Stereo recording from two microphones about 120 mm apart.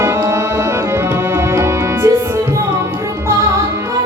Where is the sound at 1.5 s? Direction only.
25° right (ahead or behind).